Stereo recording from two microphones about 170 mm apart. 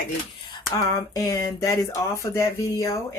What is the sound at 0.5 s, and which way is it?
Speech, 20° left (ahead or behind).